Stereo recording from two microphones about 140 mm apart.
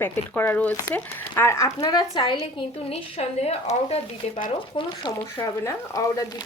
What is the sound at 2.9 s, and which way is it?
Speech, 45° left (ahead or behind).